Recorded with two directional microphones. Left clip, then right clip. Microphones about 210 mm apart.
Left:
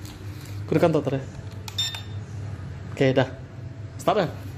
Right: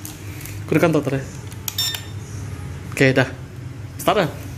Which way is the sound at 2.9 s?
5° left (ahead or behind).